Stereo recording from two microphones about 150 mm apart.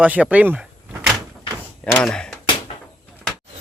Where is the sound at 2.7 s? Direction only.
45° left (ahead or behind).